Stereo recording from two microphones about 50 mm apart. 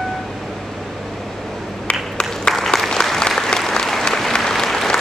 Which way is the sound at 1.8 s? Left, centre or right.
Centre.